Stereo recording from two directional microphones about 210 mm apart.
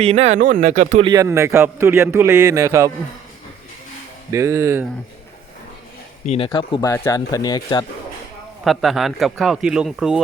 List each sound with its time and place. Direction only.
0.0 s speech: 30° right (ahead or behind)
1.0 s a man's voice: 15° right (ahead or behind)
4.3 s a man's voice: 15° right (ahead or behind)
6.2 s speech: 25° left (ahead or behind)
8.6 s a man's voice: centre (ahead or behind)